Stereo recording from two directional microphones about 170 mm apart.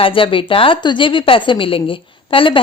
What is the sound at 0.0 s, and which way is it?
Speech, 30° left (ahead or behind).